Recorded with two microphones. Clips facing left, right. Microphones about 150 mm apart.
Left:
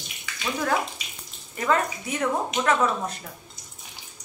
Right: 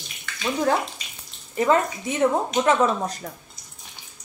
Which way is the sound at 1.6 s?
25° right (ahead or behind).